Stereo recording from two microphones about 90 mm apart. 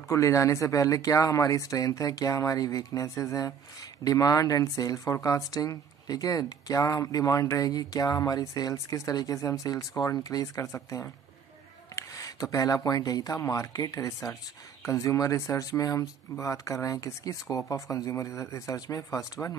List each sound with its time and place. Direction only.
0.1 s speech: 35° left (ahead or behind)
11.9 s speech: 40° left (ahead or behind)